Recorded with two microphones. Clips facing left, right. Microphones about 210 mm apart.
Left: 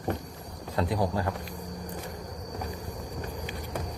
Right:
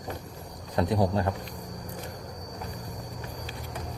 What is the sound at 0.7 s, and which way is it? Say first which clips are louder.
Speech: right 3 dB; 20° right (ahead or behind).